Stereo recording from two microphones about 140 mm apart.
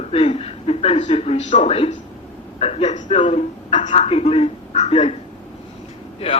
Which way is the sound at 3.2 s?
40° left (ahead or behind).